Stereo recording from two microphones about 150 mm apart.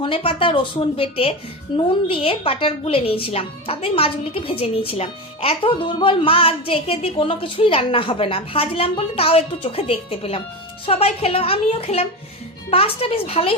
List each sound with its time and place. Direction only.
0.0 s a woman's voice: 35° left (ahead or behind)